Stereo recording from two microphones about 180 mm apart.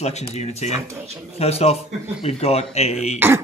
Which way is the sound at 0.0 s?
35° left (ahead or behind).